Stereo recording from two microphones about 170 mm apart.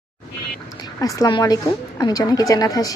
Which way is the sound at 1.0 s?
20° left (ahead or behind).